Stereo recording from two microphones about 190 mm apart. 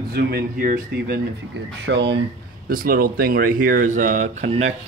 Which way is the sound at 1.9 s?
70° right (ahead or behind).